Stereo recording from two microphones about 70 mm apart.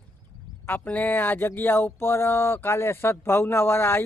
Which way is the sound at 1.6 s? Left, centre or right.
Left.